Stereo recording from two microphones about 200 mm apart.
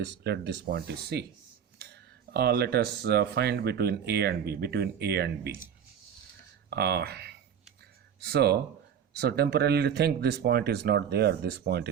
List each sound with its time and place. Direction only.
0.0 s speech: 60° right (ahead or behind)
2.3 s speech: 55° right (ahead or behind)
6.7 s speech: 55° right (ahead or behind)